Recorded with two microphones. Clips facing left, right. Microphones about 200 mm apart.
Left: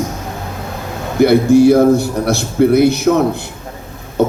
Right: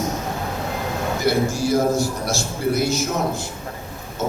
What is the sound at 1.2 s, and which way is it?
A man's voice, 60° left (ahead or behind).